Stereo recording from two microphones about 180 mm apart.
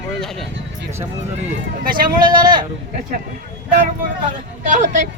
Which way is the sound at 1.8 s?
55° right (ahead or behind).